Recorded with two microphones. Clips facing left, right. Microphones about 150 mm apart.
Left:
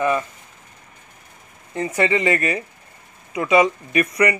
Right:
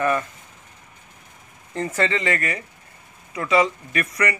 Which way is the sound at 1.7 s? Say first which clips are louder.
Left 2 dB; 5° left (ahead or behind).